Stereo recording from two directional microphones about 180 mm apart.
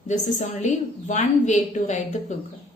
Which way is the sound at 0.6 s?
40° left (ahead or behind).